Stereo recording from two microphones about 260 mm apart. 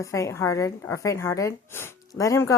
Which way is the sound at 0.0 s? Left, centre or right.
Centre.